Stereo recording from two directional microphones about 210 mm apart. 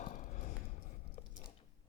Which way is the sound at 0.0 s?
40° left (ahead or behind).